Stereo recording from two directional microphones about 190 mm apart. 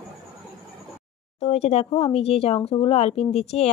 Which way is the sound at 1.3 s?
35° left (ahead or behind).